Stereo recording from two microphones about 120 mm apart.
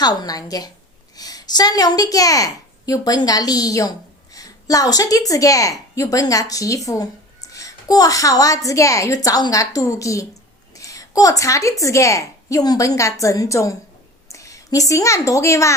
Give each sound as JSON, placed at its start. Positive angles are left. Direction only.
{"t": 0.0, "sound": "a woman's voice", "side_deg": 35}
{"t": 10.8, "sound": "a sound", "side_deg": 30}
{"t": 11.8, "sound": "a woman's voice", "side_deg": 25}